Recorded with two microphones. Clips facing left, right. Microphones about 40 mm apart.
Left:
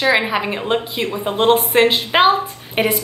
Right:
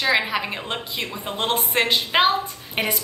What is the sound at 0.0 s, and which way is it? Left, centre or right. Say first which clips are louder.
A woman's voice: left 5 dB; centre.